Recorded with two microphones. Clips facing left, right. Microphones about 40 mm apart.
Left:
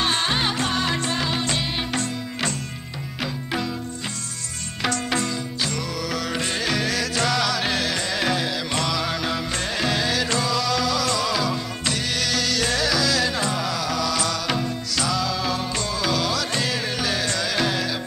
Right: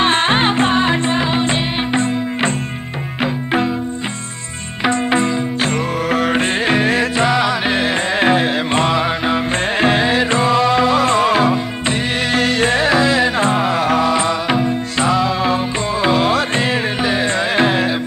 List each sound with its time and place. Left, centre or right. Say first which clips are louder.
0.0 s music: right 8 dB; right
4.8 s music: right 9 dB; right